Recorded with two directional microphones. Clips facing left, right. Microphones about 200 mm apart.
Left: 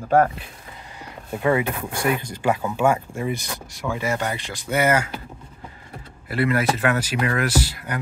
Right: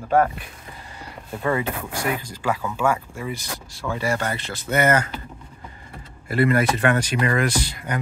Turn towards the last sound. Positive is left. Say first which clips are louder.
# left 2 dB
turn(degrees=5)  # may be behind; listen again after turning